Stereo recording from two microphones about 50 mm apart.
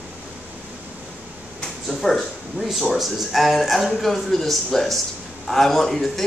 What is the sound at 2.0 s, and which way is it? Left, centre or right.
A man's voice, centre.